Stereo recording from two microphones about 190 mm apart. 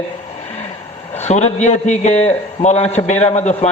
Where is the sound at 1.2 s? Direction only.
35° left (ahead or behind).